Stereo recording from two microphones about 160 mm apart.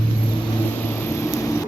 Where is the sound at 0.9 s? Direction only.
15° left (ahead or behind).